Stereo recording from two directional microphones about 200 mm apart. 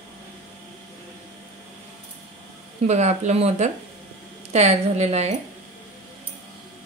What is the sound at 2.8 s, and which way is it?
A woman's voice, 35° right (ahead or behind).